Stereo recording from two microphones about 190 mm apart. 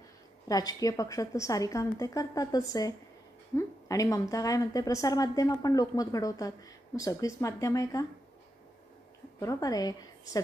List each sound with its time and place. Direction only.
0.5 s a woman's voice: 20° left (ahead or behind)
9.4 s a woman's voice: 15° left (ahead or behind)